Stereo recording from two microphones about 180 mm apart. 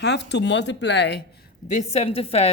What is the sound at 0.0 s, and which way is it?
Speech, 70° left (ahead or behind).